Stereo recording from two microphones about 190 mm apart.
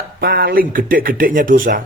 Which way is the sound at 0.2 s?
50° right (ahead or behind).